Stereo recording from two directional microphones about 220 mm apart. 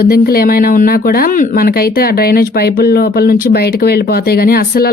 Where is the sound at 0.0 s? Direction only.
45° left (ahead or behind).